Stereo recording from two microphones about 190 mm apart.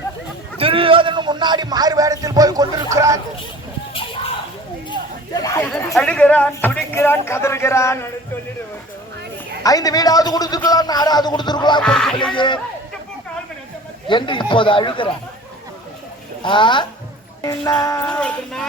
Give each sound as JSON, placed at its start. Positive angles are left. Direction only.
{"t": 0.6, "sound": "speech", "side_deg": -30}
{"t": 5.6, "sound": "speech", "side_deg": 0}
{"t": 9.6, "sound": "a man's voice", "side_deg": 20}
{"t": 11.8, "sound": "music", "side_deg": 5}
{"t": 12.1, "sound": "a man's voice", "side_deg": 25}
{"t": 14.1, "sound": "a man's voice", "side_deg": 25}
{"t": 16.4, "sound": "a man's voice", "side_deg": 25}
{"t": 18.1, "sound": "speech", "side_deg": 5}